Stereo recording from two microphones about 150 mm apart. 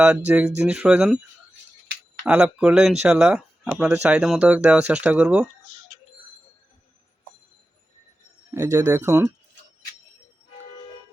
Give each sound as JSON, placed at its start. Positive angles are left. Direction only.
{"t": 0.3, "sound": "speech", "side_deg": -5}
{"t": 2.2, "sound": "speech", "side_deg": -5}
{"t": 8.5, "sound": "speech", "side_deg": -20}